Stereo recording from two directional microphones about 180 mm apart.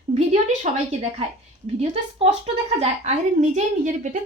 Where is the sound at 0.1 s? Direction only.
40° right (ahead or behind).